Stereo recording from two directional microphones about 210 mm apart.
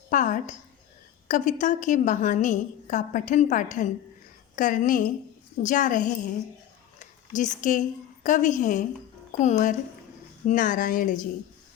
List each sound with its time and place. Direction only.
0.1 s a woman's voice: 40° left (ahead or behind)